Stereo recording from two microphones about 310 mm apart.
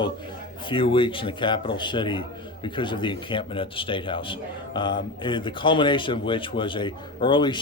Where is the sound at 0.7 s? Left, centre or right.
Centre.